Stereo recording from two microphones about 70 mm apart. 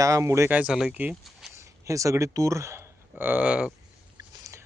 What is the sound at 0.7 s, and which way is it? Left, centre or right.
Speech, centre.